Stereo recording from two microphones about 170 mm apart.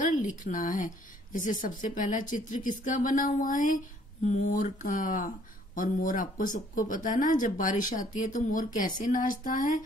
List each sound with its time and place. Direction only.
0.0 s a woman's voice: 50° left (ahead or behind)